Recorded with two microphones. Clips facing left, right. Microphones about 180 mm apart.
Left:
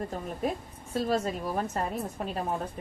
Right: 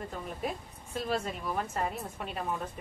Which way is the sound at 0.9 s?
40° left (ahead or behind).